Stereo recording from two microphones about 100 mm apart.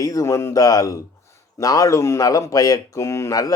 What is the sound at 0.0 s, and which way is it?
Speech, 35° left (ahead or behind).